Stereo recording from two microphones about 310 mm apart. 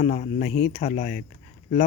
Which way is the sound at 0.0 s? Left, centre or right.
Left.